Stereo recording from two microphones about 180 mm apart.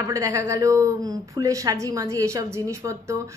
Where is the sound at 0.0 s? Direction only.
15° right (ahead or behind).